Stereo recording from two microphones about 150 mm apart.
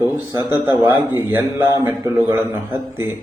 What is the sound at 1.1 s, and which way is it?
A man's voice, 15° right (ahead or behind).